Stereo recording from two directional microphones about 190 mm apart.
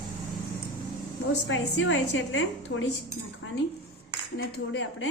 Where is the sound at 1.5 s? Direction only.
80° left.